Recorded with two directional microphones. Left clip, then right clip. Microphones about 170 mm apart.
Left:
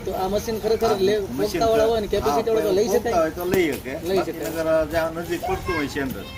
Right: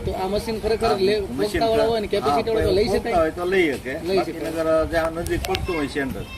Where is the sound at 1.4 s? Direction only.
10° left (ahead or behind).